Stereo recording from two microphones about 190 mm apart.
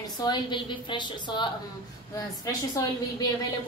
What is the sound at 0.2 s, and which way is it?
A woman's voice, 25° left (ahead or behind).